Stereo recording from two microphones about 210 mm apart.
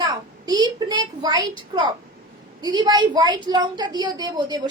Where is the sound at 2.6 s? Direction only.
20° right (ahead or behind).